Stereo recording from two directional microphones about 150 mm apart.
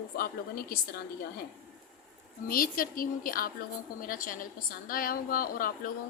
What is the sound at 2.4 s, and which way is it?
A woman's voice, 70° left (ahead or behind).